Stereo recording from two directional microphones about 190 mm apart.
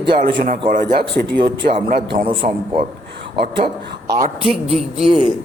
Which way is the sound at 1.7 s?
45° right (ahead or behind).